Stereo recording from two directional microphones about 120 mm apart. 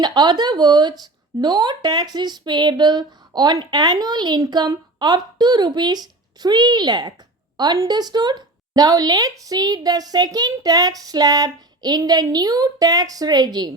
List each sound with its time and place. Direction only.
0.0 s speech: 35° right (ahead or behind)